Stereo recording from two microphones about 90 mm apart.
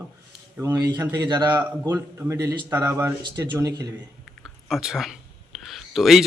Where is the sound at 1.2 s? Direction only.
45° right (ahead or behind).